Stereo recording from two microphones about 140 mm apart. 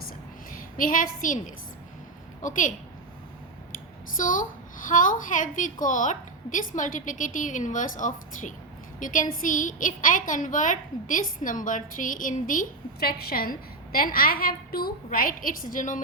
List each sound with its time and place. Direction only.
0.8 s a woman's voice: 75° left (ahead or behind)
4.2 s a woman's voice: 70° left (ahead or behind)